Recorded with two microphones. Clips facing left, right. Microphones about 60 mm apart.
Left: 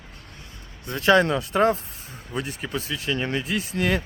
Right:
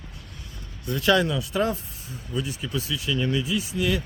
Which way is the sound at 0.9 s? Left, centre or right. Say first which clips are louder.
Left 3 dB; left.